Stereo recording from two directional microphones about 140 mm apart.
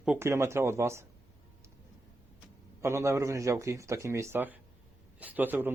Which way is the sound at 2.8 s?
20° right (ahead or behind).